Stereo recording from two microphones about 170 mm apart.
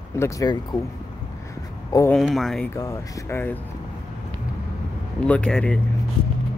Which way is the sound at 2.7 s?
20° left (ahead or behind).